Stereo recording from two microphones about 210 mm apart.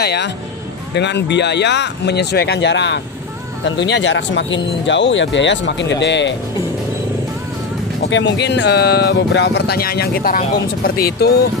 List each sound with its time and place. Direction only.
0.0 s speech: 50° left (ahead or behind)
8.1 s speech: 60° left (ahead or behind)